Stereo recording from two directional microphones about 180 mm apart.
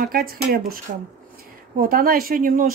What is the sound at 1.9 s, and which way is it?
Speech, 55° right (ahead or behind).